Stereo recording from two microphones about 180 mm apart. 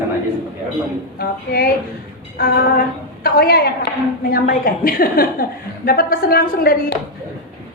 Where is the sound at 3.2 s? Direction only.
60° left (ahead or behind).